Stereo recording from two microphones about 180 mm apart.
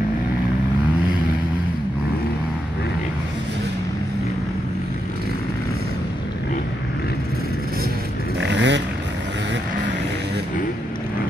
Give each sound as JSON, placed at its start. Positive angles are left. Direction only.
{"t": 8.4, "sound": "vehicle", "side_deg": -75}